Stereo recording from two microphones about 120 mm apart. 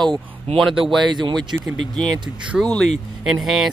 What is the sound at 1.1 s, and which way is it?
Speech, 40° right (ahead or behind).